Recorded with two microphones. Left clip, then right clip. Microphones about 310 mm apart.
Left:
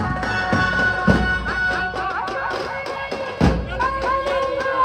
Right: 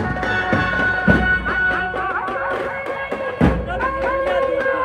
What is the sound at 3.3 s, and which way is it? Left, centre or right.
Music, left.